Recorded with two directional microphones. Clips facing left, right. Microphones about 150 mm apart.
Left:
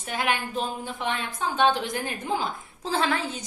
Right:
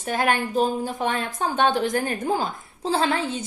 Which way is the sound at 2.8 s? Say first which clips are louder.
Right 3 dB; 30° right (ahead or behind).